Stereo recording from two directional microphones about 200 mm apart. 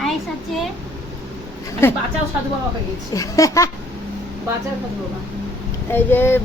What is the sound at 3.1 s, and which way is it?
Speech, 15° left (ahead or behind).